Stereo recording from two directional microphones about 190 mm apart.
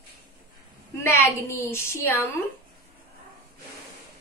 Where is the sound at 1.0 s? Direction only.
15° left (ahead or behind).